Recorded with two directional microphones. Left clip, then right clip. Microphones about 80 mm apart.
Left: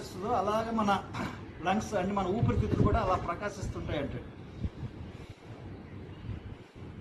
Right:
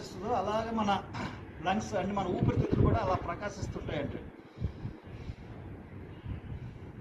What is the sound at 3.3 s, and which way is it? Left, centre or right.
Speech, left.